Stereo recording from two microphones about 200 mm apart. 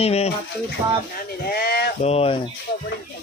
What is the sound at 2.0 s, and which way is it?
Speech, 30° left (ahead or behind).